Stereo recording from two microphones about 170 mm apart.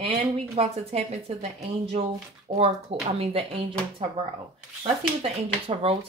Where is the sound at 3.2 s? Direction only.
35° right (ahead or behind).